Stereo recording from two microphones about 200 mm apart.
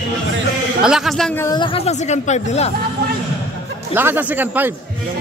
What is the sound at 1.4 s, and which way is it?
Speech, 20° left (ahead or behind).